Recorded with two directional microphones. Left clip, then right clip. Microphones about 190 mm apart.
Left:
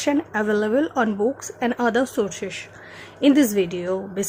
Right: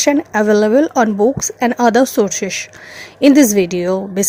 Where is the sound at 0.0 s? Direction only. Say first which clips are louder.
Right 8 dB; 30° right (ahead or behind).